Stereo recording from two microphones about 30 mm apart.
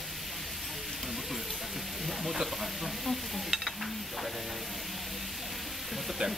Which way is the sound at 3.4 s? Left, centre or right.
Centre.